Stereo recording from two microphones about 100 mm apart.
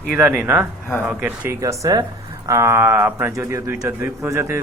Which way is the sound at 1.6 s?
35° right (ahead or behind).